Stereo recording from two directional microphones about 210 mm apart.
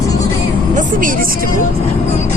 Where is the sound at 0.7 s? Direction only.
40° right (ahead or behind).